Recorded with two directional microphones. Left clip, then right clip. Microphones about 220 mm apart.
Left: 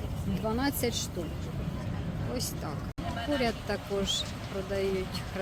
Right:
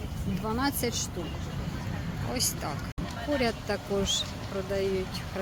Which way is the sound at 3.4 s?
10° right (ahead or behind).